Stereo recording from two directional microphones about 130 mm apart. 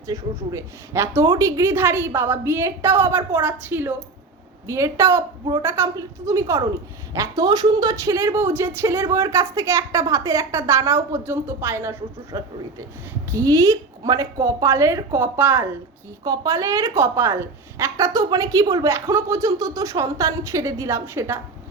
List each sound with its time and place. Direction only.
0.1 s a woman's voice: 20° right (ahead or behind)
12.3 s a woman's voice: 30° right (ahead or behind)
16.2 s a woman's voice: 30° right (ahead or behind)